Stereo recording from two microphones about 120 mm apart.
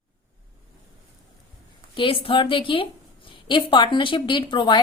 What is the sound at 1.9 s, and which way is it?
A woman's voice, 45° left (ahead or behind).